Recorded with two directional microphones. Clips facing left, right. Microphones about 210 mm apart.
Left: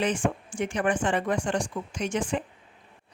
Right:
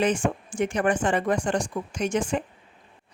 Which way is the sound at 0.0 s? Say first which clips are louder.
Right 3 dB; 45° right (ahead or behind).